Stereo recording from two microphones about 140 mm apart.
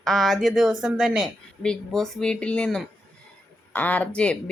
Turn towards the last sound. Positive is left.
turn(degrees=10)  # may be behind; listen again after turning